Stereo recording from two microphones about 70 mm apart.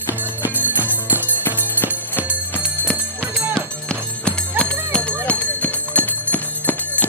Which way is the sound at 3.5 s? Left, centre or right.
Centre.